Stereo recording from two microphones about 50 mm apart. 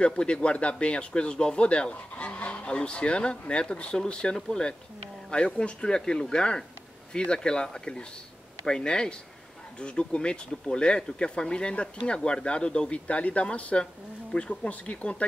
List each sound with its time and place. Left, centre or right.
0.0 s speech: left